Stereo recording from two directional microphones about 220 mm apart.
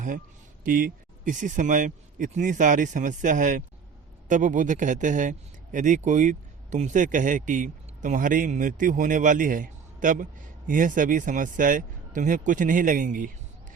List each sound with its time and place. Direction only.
0.6 s speech: 40° right (ahead or behind)